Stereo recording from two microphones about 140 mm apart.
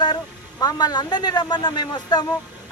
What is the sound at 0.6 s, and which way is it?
Speech, 30° left (ahead or behind).